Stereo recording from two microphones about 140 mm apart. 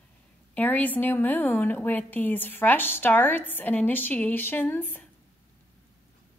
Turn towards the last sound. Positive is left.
turn(degrees=15)  # may be behind; listen again after turning